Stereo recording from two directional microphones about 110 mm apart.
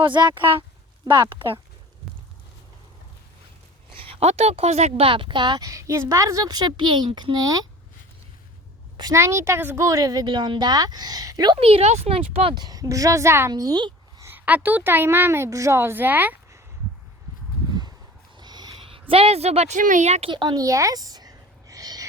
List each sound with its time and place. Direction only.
0.0 s speech: 45° right (ahead or behind)
4.0 s speech: 70° right (ahead or behind)
5.0 s a woman's voice: 50° right (ahead or behind); by 7.7 s 35° right (ahead or behind)
9.1 s a woman's voice: 25° right (ahead or behind); by 11.6 s 40° right (ahead or behind)
11.6 s speech: 65° right (ahead or behind)
12.5 s a woman's voice: 35° right (ahead or behind)
13.5 s a sound: 35° right (ahead or behind)
14.3 s a woman's voice: 15° right (ahead or behind)
18.3 s speech: 40° right (ahead or behind); by 20.3 s 85° right
20.3 s a sound: 40° right (ahead or behind)